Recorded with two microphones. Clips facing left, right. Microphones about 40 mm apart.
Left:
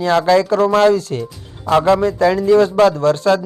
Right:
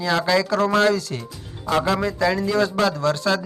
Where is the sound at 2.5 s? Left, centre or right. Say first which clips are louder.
Left 9 dB; left.